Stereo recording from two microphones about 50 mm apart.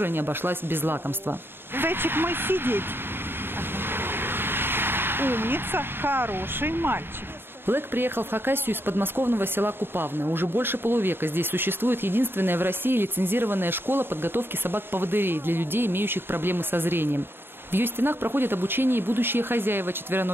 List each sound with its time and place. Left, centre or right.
0.0 s speech: right
3.9 s a sound: right
7.6 s speech: right